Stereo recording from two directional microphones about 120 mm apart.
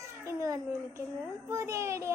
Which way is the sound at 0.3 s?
25° right (ahead or behind).